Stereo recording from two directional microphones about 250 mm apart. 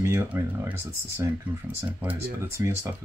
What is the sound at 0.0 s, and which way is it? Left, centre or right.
Speech, centre.